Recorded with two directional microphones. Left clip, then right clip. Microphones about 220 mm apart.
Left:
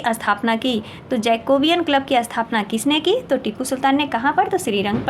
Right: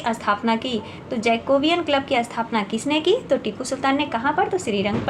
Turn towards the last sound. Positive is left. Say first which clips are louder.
# left 3 dB
turn(degrees=30)  # may be behind; listen again after turning